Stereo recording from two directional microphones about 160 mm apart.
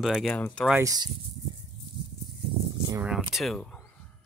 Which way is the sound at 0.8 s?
25° right (ahead or behind).